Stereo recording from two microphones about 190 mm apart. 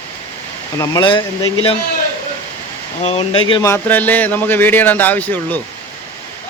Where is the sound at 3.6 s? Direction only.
10° left (ahead or behind).